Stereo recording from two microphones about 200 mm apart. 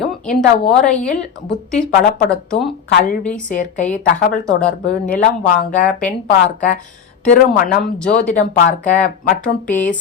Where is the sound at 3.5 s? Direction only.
40° left (ahead or behind).